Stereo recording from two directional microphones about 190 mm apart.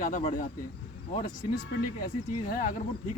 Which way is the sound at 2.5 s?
50° left (ahead or behind).